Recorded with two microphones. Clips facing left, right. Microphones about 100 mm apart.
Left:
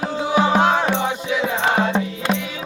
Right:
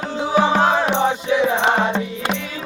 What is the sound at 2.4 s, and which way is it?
Music, 10° left (ahead or behind).